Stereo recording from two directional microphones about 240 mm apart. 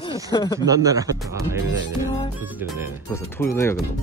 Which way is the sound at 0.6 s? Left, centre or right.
Centre.